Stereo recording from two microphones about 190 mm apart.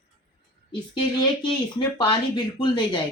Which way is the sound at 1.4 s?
25° left (ahead or behind).